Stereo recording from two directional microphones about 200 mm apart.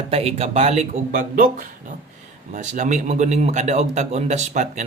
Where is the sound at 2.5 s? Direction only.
40° right (ahead or behind).